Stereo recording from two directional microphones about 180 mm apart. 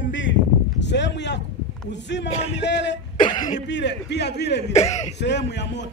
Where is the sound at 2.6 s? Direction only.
80° left.